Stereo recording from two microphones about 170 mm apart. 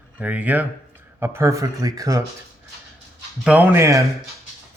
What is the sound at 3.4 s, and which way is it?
Speech, 10° right (ahead or behind).